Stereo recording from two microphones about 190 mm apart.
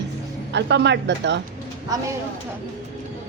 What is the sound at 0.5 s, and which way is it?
Speech, 65° right (ahead or behind).